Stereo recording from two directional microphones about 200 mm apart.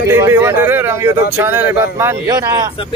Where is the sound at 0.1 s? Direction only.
15° right (ahead or behind).